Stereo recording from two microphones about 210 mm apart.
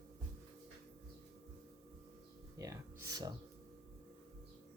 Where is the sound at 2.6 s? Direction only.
15° right (ahead or behind).